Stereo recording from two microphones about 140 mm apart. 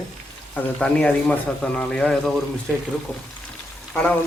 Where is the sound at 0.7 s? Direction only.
10° left (ahead or behind).